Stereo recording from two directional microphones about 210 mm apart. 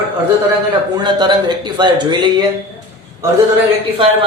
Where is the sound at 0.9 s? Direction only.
20° right (ahead or behind).